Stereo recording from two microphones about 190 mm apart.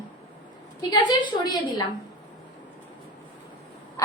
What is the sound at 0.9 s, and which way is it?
Speech, 20° left (ahead or behind).